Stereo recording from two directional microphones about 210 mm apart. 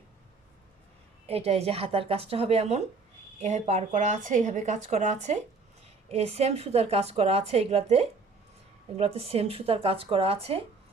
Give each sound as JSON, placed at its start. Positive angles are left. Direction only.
{"t": 1.3, "sound": "a woman's voice", "side_deg": -30}